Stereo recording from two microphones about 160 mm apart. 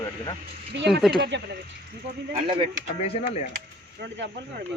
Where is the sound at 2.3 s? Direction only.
30° right (ahead or behind).